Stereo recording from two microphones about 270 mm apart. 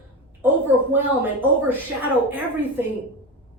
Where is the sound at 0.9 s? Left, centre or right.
Centre.